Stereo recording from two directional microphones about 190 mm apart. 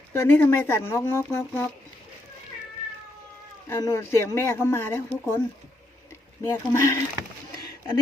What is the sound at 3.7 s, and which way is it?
Speech, 15° left (ahead or behind).